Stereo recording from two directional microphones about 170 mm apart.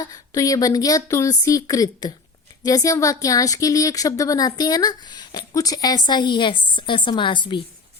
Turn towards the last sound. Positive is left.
turn(degrees=30)  # may be behind; listen again after turning